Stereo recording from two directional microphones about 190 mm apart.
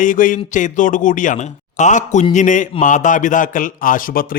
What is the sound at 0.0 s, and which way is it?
Speech, 45° left (ahead or behind).